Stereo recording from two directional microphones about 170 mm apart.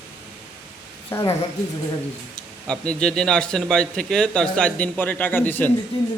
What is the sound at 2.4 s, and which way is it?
A man's voice, 5° left (ahead or behind).